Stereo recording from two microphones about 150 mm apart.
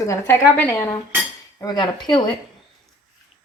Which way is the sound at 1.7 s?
30° left (ahead or behind).